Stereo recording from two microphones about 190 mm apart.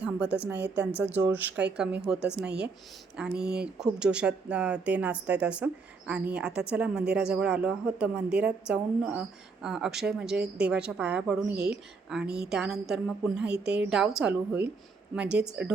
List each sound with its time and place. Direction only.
0.5 s speech: 60° right (ahead or behind)
0.9 s a woman's voice: 10° right (ahead or behind)
3.4 s speech: 55° right (ahead or behind)
3.8 s a woman's voice: 5° right (ahead or behind)